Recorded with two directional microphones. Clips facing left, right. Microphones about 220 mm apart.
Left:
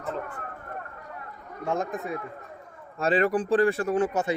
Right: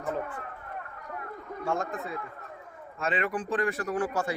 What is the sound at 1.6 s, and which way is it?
Speech, 20° left (ahead or behind).